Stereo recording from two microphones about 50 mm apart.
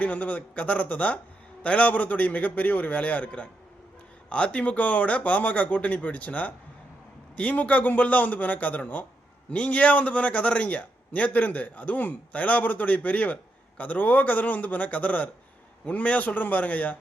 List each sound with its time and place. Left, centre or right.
0.0 s a man's voice: left